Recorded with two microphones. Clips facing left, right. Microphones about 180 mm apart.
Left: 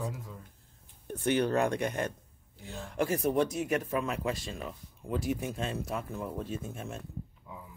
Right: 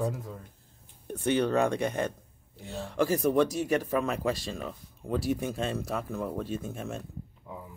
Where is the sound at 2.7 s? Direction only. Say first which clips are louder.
Right 4 dB; 35° right (ahead or behind).